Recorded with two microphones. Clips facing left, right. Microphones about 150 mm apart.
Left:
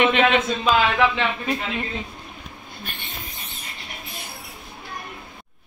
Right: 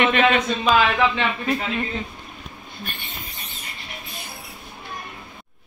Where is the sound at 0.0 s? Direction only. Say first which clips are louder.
Even; 15° left (ahead or behind).